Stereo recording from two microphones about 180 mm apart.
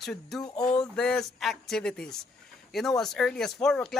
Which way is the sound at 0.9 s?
5° left (ahead or behind).